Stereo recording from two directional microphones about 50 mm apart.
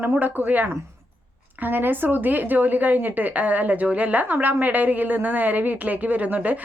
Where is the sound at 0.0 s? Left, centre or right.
Right.